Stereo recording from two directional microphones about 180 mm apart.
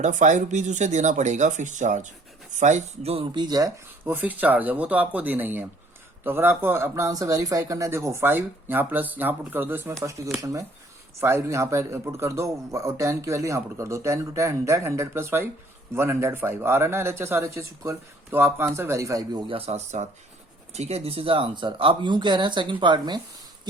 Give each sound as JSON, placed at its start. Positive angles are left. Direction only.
{"t": 0.0, "sound": "speech", "side_deg": -40}
{"t": 4.0, "sound": "a man's voice", "side_deg": -10}